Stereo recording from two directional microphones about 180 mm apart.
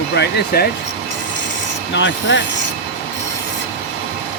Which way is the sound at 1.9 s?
85° left.